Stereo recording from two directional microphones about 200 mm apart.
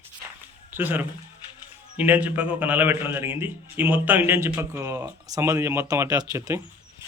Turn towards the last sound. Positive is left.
turn(degrees=-15)  # may be behind; listen again after turning